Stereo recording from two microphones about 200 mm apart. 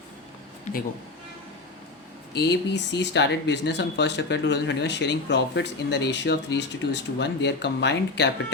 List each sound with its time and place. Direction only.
2.3 s speech: 60° left (ahead or behind)